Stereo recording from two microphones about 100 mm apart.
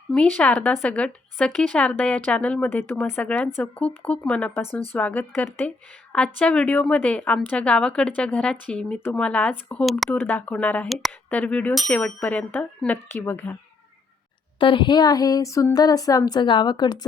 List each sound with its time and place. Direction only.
0.1 s speech: 10° left (ahead or behind)
10.8 s speech: centre (ahead or behind)
11.3 s speech: 15° left (ahead or behind)
11.7 s speech: centre (ahead or behind)
12.0 s speech: 10° left (ahead or behind)
14.6 s speech: 55° left (ahead or behind)